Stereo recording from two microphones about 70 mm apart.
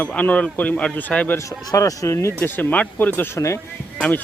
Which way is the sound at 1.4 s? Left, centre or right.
Left.